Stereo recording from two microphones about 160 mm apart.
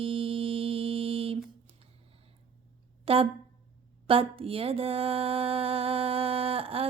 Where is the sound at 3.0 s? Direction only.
35° right (ahead or behind).